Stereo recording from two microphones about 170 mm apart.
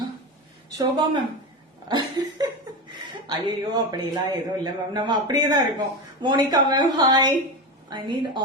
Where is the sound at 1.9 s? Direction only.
25° right (ahead or behind).